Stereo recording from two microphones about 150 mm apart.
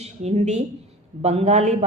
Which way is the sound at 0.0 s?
45° right (ahead or behind).